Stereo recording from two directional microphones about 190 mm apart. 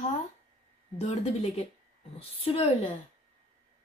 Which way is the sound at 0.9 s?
35° left (ahead or behind).